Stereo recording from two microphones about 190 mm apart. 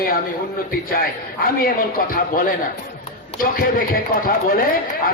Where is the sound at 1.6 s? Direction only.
50° left (ahead or behind).